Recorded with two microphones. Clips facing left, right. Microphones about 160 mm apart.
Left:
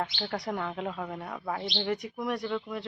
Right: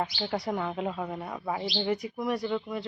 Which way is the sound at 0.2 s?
Centre (ahead or behind).